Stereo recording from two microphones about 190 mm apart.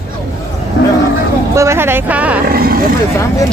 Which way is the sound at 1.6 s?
15° right (ahead or behind).